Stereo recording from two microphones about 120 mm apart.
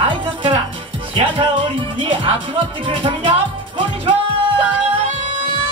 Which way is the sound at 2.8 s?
45° right (ahead or behind).